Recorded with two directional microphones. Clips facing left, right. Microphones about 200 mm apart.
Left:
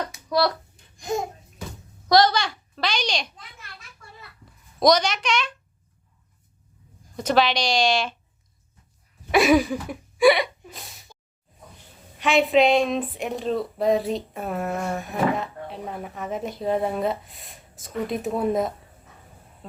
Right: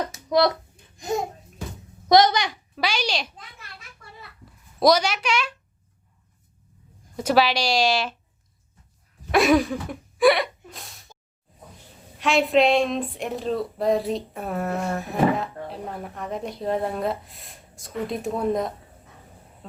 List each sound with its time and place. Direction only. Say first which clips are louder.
0.3 s speech: right 3 dB; 20° right (ahead or behind)
2.0 s a child's voice: right 1 dB; 20° right (ahead or behind)
4.8 s speech: even; 5° right (ahead or behind)
7.2 s speech: right 1 dB; 5° right (ahead or behind)
9.3 s a sound: left 1 dB; centre (ahead or behind)
12.2 s speech: left 1 dB; centre (ahead or behind)